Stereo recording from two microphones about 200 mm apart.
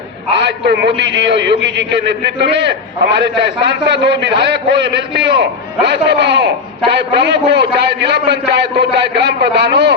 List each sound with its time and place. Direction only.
0.3 s a man's voice: 60° right (ahead or behind)